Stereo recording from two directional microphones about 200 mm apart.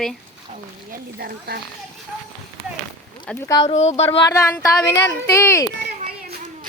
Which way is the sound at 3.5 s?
20° left (ahead or behind).